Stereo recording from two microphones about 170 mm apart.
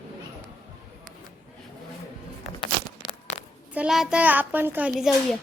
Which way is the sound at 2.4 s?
30° left (ahead or behind).